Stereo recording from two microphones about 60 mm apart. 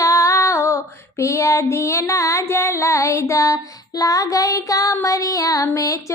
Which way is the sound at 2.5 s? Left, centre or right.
Left.